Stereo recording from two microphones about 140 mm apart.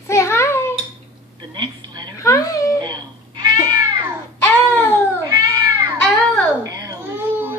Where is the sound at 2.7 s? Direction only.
30° right (ahead or behind).